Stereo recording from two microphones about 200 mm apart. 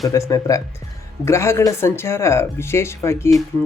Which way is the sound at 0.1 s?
15° left (ahead or behind).